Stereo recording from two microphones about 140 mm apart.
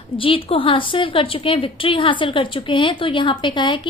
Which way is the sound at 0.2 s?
40° left (ahead or behind).